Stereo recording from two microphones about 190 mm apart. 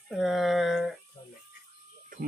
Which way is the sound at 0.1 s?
Centre (ahead or behind).